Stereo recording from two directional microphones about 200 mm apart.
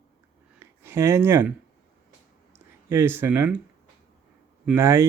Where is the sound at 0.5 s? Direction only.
10° right (ahead or behind).